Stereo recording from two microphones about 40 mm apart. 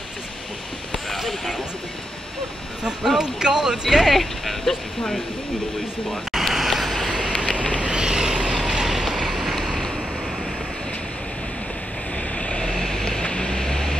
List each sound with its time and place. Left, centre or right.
0.9 s a sound: centre
3.2 s speech: centre
6.0 s a sound: centre
7.1 s vehicle: centre
9.2 s vehicle: centre
12.4 s vehicle: left